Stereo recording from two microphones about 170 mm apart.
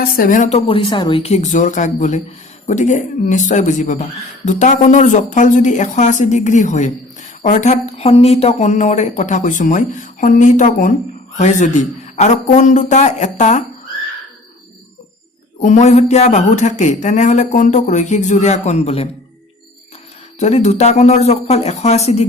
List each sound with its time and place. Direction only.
0.0 s speech: 60° left (ahead or behind)
0.7 s speech: 30° left (ahead or behind)
15.6 s speech: 45° left (ahead or behind)
20.4 s speech: 40° left (ahead or behind)